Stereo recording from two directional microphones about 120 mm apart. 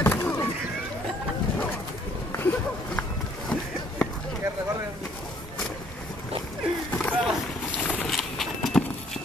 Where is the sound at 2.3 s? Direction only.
15° left (ahead or behind).